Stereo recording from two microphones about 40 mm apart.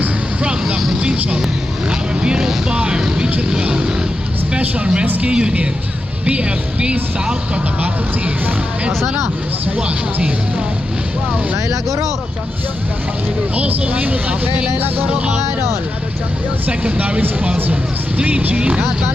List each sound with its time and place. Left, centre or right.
1.9 s vehicle: right
3.6 s speech: right
7.5 s speech: right
9.7 s speech: right
13.6 s speech: right
16.6 s speech: right
18.2 s speech: right